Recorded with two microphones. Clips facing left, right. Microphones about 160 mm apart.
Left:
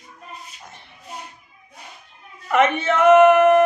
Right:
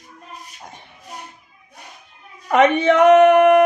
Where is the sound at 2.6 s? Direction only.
15° right (ahead or behind).